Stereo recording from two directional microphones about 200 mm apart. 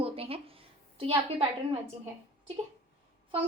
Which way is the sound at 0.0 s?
30° right (ahead or behind).